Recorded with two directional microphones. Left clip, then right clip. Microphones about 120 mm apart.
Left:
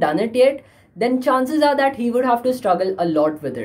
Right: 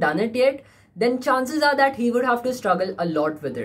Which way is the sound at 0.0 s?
20° left (ahead or behind).